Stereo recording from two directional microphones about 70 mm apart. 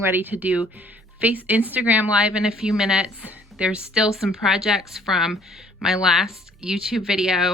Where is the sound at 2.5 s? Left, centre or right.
Centre.